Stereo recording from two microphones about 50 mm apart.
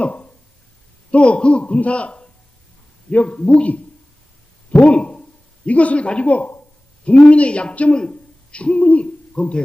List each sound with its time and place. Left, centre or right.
0.0 s a sound: left
1.1 s a man's voice: left
3.2 s a man's voice: left
8.5 s hoot: left